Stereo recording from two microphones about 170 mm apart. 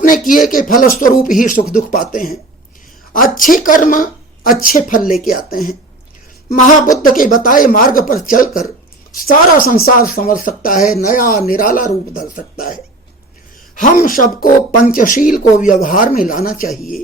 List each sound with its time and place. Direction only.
0.0 s speech: 50° left (ahead or behind)
13.7 s speech: 55° left (ahead or behind)
16.6 s speech: centre (ahead or behind)